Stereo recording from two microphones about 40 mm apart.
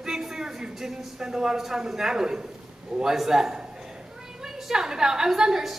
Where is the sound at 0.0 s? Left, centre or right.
Centre.